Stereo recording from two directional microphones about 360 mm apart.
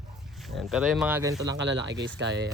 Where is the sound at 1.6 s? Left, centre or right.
Right.